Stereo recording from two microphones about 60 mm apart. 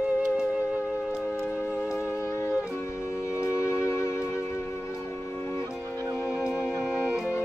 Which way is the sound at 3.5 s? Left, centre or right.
Left.